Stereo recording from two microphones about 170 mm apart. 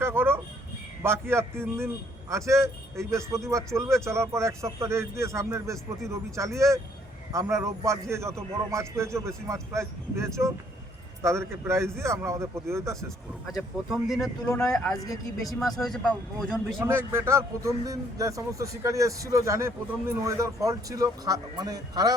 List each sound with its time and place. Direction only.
0.0 s a sound: 15° right (ahead or behind)
1.0 s speech: 15° right (ahead or behind)
13.5 s speech: centre (ahead or behind)
14.9 s speech: 20° left (ahead or behind)
15.4 s speech: centre (ahead or behind)
16.8 s a man's voice: 15° right (ahead or behind)